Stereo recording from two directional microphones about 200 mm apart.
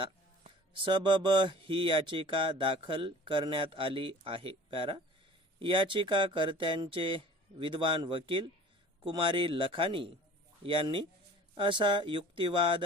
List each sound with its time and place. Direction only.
0.7 s speech: 25° right (ahead or behind)